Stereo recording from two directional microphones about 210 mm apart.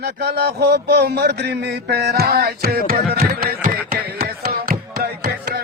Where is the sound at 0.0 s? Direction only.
50° right (ahead or behind).